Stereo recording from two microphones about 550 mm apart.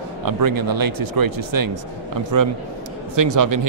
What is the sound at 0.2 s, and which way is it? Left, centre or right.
Speech, right.